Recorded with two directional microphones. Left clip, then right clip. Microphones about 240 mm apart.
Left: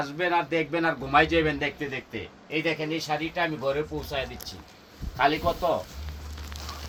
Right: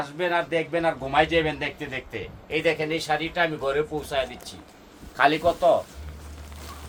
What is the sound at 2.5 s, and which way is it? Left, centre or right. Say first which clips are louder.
Speech: right 4 dB; centre.